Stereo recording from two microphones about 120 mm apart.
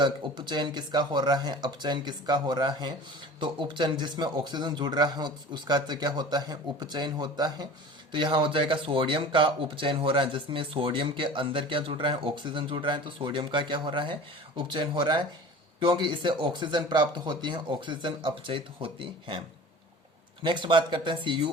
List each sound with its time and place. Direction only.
0.0 s speech: 40° right (ahead or behind)
20.4 s speech: 40° right (ahead or behind)